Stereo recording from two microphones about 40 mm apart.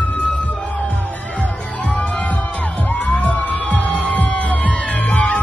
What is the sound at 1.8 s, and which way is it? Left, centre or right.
Music, left.